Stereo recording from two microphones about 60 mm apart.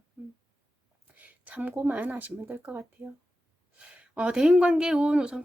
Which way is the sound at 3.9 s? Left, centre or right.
Right.